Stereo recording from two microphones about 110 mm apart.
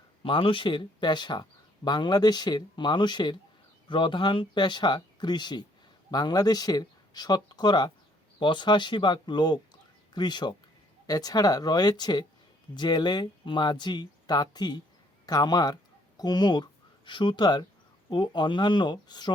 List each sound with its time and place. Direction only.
0.2 s speech: 55° left (ahead or behind)